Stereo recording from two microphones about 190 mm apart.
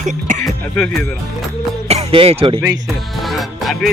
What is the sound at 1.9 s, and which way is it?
Speech, 30° right (ahead or behind).